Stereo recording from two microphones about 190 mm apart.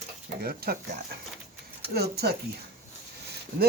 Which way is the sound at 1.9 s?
55° right (ahead or behind).